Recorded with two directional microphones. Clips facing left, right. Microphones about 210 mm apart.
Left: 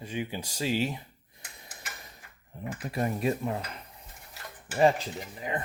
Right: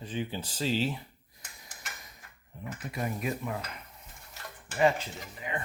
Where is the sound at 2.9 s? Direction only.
35° left (ahead or behind).